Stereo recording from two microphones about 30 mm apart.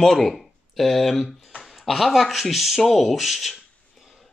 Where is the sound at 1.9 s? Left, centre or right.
Centre.